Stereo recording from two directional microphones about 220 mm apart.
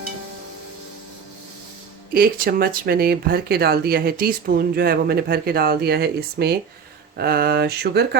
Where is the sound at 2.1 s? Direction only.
40° right (ahead or behind).